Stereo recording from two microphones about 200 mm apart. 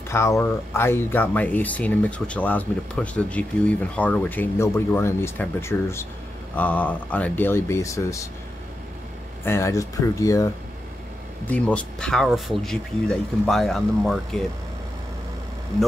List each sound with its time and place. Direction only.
0.1 s speech: 15° left (ahead or behind)
9.4 s speech: 15° left (ahead or behind)